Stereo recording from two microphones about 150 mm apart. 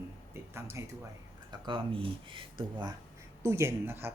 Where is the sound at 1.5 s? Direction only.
30° right (ahead or behind).